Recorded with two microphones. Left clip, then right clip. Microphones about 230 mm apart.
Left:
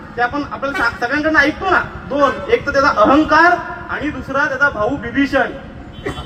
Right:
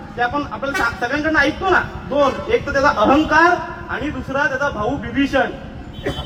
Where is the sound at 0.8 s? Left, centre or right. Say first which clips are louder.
Left 3 dB; left.